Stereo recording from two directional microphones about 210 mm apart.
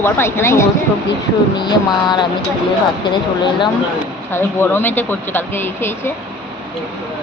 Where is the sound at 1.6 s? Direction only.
20° left (ahead or behind).